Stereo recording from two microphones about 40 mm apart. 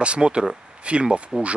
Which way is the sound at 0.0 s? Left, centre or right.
Right.